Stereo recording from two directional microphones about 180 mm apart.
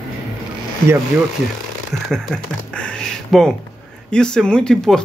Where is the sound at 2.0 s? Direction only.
5° left (ahead or behind).